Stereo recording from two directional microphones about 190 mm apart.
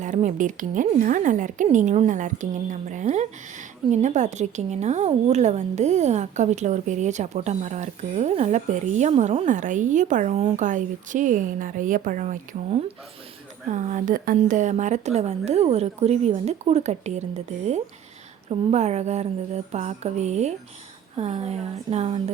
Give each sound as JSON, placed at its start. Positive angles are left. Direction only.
{"t": 0.0, "sound": "a woman's voice", "side_deg": -40}